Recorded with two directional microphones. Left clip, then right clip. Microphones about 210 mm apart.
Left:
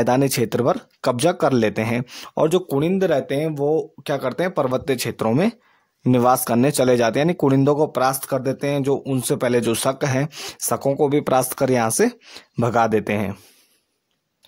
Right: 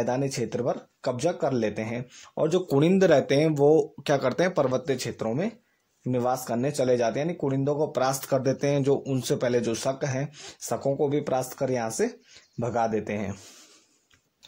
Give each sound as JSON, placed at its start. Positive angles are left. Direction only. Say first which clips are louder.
{"t": 0.0, "sound": "speech", "louder": "left 9 dB", "side_deg": 40}
{"t": 2.7, "sound": "speech", "louder": "left 1 dB", "side_deg": 10}
{"t": 8.0, "sound": "speech", "louder": "left 5 dB", "side_deg": 20}